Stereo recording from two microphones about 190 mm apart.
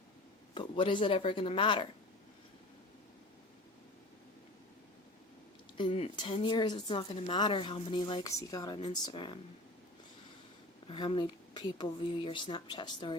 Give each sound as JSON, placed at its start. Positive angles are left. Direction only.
{"t": 0.5, "sound": "a woman's voice", "side_deg": 25}
{"t": 5.7, "sound": "a woman's voice", "side_deg": 30}
{"t": 10.8, "sound": "a woman's voice", "side_deg": 25}